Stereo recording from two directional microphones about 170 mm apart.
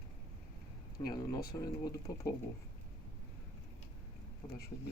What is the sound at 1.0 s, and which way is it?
Speech, 20° left (ahead or behind).